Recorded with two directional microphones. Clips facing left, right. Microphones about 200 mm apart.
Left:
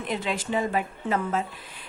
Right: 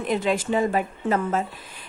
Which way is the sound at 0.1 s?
45° right (ahead or behind).